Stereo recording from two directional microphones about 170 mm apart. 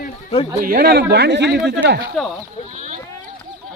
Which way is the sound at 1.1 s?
80° right.